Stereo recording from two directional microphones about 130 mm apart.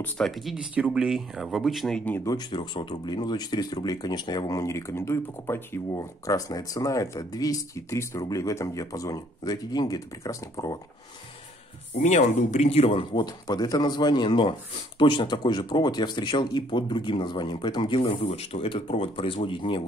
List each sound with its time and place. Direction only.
0.0 s speech: centre (ahead or behind)
2.2 s speech: 35° left (ahead or behind)
12.0 s speech: 65° left (ahead or behind)
13.1 s speech: 30° left (ahead or behind)
18.2 s speech: 55° left (ahead or behind)